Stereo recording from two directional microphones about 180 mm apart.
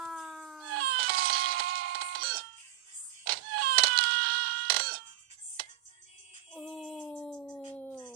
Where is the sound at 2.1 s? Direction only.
55° right (ahead or behind).